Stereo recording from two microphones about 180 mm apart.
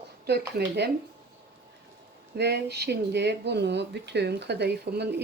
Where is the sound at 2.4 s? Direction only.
65° right (ahead or behind).